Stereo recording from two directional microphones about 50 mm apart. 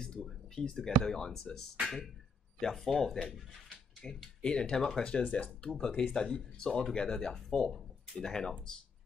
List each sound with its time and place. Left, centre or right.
0.2 s speech: centre; by 5.5 s left
5.6 s speech: centre